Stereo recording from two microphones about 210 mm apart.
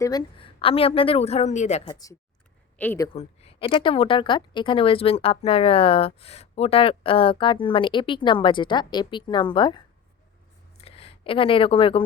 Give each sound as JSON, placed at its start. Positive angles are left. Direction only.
{"t": 0.0, "sound": "speech", "side_deg": 20}
{"t": 2.7, "sound": "speech", "side_deg": 10}
{"t": 3.2, "sound": "speech", "side_deg": 25}
{"t": 10.8, "sound": "a sound", "side_deg": 30}